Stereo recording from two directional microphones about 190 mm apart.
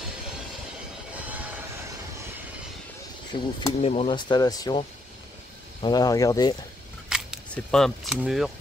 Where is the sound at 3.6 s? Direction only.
30° left (ahead or behind).